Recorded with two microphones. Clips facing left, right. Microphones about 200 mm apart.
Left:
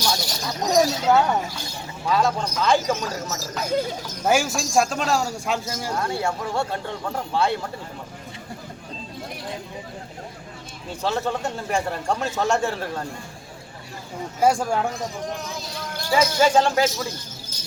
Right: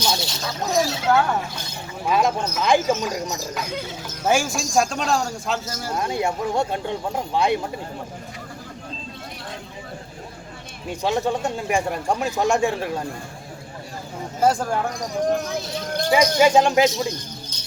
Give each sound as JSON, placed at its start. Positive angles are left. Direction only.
{"t": 0.0, "sound": "a sound", "side_deg": -25}
{"t": 1.0, "sound": "speech", "side_deg": 20}
{"t": 1.5, "sound": "a sound", "side_deg": -20}
{"t": 2.6, "sound": "speech", "side_deg": -15}
{"t": 3.6, "sound": "speech", "side_deg": 40}
{"t": 4.0, "sound": "speech", "side_deg": 5}
{"t": 6.0, "sound": "speech", "side_deg": -15}
{"t": 11.0, "sound": "speech", "side_deg": -15}
{"t": 14.4, "sound": "speech", "side_deg": 10}
{"t": 15.3, "sound": "speech", "side_deg": -60}
{"t": 16.0, "sound": "speech", "side_deg": -15}